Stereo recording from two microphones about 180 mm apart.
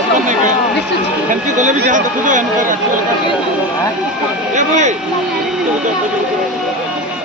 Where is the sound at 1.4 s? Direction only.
45° right (ahead or behind).